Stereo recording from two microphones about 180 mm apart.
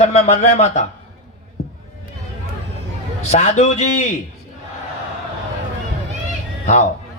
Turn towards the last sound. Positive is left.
turn(degrees=40)  # may be behind; listen again after turning